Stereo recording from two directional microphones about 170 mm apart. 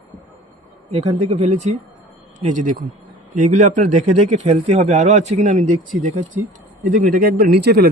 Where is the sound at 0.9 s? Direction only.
35° right (ahead or behind).